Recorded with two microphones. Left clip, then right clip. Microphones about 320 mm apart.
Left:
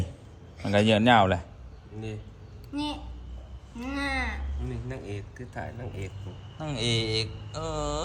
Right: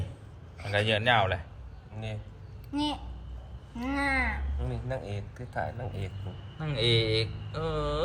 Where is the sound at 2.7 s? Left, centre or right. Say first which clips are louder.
Right 2 dB; centre.